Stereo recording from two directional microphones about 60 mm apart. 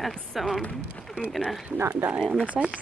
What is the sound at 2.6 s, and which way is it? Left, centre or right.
Speech, centre.